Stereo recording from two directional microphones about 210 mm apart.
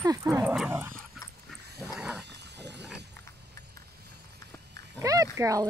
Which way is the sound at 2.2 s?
55° right (ahead or behind).